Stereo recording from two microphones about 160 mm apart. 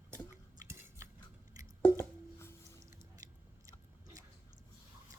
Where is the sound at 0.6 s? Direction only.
15° right (ahead or behind).